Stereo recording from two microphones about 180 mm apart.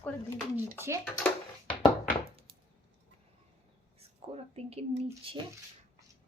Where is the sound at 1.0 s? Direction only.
5° left (ahead or behind).